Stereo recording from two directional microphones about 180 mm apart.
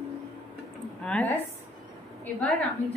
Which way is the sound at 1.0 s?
10° left (ahead or behind).